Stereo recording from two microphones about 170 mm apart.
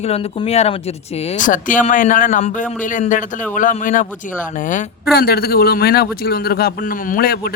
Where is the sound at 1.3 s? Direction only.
50° left (ahead or behind).